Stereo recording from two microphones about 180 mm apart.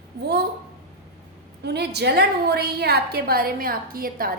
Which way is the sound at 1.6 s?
65° right (ahead or behind).